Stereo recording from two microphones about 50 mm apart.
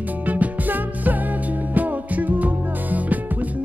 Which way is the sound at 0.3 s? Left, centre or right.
Right.